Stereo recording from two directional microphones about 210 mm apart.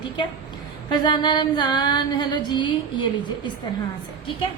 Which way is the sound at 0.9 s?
20° left (ahead or behind).